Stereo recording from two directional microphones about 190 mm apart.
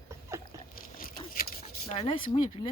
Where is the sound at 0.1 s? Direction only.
15° right (ahead or behind).